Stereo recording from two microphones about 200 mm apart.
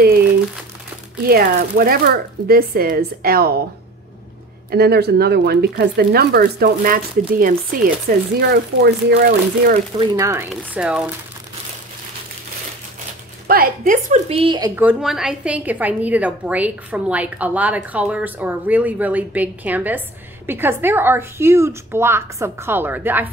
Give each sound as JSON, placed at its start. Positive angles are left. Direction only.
{"t": 1.2, "sound": "speech", "side_deg": -50}
{"t": 4.6, "sound": "speech", "side_deg": -50}
{"t": 9.9, "sound": "a woman's voice", "side_deg": -15}
{"t": 13.5, "sound": "speech", "side_deg": -45}
{"t": 14.3, "sound": "a woman's voice", "side_deg": -25}
{"t": 14.8, "sound": "a woman's voice", "side_deg": -5}